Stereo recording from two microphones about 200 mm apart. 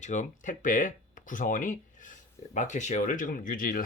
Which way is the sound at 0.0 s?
40° left (ahead or behind).